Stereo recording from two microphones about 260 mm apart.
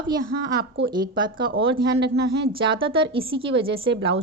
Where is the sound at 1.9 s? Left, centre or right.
Right.